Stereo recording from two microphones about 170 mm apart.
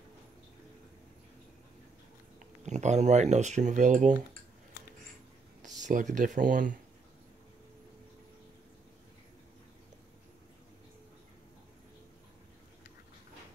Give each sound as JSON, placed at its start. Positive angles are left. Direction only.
{"t": 2.6, "sound": "speech", "side_deg": -45}
{"t": 5.6, "sound": "speech", "side_deg": -45}